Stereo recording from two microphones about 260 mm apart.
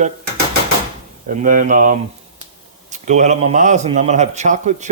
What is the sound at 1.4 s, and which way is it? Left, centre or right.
Speech, right.